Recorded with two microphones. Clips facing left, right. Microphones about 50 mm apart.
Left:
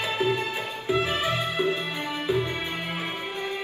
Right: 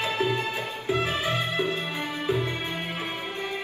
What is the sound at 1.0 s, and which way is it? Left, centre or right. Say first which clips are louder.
Music: left 1 dB; left.